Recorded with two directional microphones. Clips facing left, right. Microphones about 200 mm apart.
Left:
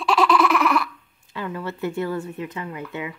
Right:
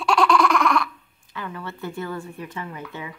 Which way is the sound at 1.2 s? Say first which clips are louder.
Left 4 dB; 25° left (ahead or behind).